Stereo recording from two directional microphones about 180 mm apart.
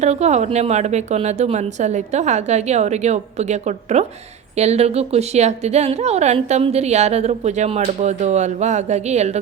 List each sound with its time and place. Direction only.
0.0 s a woman's voice: 40° right (ahead or behind)